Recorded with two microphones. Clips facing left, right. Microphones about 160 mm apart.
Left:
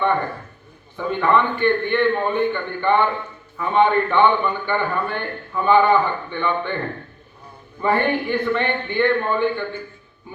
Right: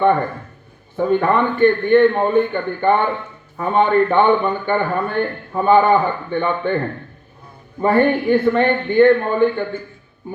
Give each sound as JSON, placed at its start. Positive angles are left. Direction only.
{"t": 0.9, "sound": "a man's voice", "side_deg": -45}
{"t": 7.8, "sound": "a man's voice", "side_deg": -40}